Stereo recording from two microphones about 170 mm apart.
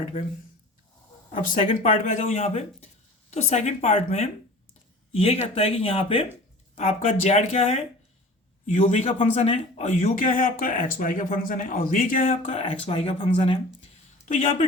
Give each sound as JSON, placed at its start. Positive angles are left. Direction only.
{"t": 1.3, "sound": "speech", "side_deg": 45}
{"t": 14.3, "sound": "speech", "side_deg": 45}